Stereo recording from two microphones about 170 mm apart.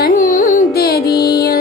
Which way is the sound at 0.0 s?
50° left (ahead or behind).